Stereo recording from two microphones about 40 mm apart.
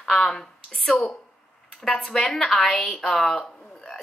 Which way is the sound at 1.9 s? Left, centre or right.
Left.